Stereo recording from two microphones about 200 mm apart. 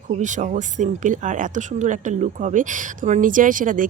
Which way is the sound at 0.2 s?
40° right (ahead or behind).